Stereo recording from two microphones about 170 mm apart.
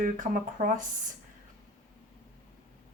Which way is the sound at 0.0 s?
50° right (ahead or behind).